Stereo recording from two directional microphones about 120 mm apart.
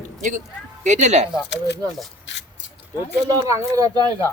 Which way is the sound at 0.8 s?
80° right.